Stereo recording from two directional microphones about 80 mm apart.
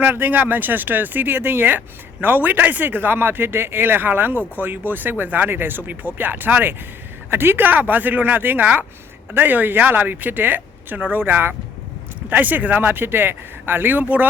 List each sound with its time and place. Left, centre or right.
0.0 s speech: right